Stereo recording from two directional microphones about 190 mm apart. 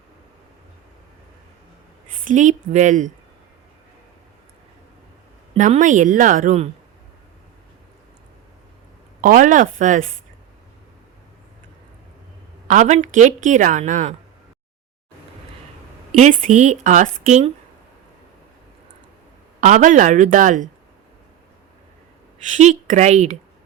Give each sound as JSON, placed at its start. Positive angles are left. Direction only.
{"t": 2.2, "sound": "speech", "side_deg": -40}
{"t": 5.5, "sound": "speech", "side_deg": -40}
{"t": 9.2, "sound": "speech", "side_deg": -45}
{"t": 12.6, "sound": "speech", "side_deg": -40}
{"t": 16.1, "sound": "speech", "side_deg": -40}
{"t": 19.6, "sound": "speech", "side_deg": -40}
{"t": 22.4, "sound": "speech", "side_deg": -40}